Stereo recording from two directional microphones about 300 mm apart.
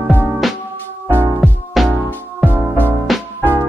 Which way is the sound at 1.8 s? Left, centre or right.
Centre.